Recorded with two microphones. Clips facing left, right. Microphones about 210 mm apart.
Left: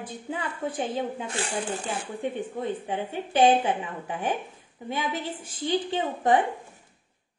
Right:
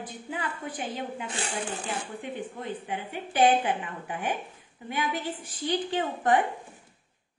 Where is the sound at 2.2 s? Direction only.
25° left (ahead or behind).